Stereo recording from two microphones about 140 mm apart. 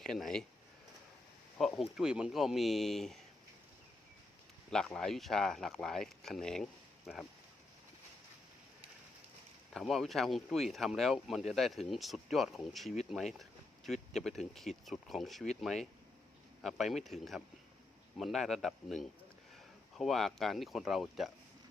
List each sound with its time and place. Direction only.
0.0 s speech: 5° left (ahead or behind)
1.5 s a sound: 5° left (ahead or behind)
2.0 s speech: 5° right (ahead or behind)
4.9 s speech: centre (ahead or behind)
9.7 s speech: centre (ahead or behind)